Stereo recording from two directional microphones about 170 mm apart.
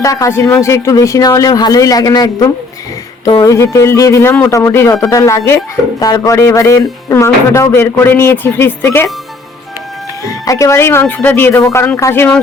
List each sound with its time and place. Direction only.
0.0 s a man's voice: 20° left (ahead or behind)
10.2 s speech: 20° left (ahead or behind)